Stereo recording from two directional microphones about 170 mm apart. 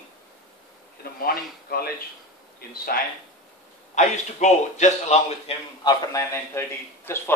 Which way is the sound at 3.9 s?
45° left (ahead or behind).